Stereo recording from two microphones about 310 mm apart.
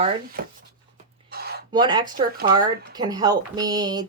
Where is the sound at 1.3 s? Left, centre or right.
Right.